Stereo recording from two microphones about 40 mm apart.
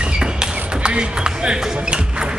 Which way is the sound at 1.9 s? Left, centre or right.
Right.